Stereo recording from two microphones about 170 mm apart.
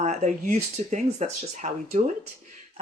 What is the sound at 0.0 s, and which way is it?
Speech, 45° right (ahead or behind).